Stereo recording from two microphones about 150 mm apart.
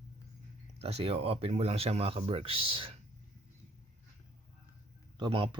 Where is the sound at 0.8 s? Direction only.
40° right (ahead or behind).